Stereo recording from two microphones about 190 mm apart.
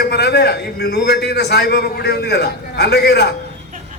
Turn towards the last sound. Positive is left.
turn(degrees=60)  # may be behind; listen again after turning